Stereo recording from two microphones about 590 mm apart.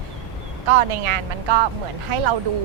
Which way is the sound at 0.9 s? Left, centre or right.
Right.